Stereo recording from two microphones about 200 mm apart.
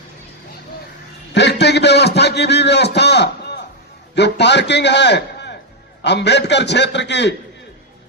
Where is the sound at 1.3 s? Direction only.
60° left (ahead or behind).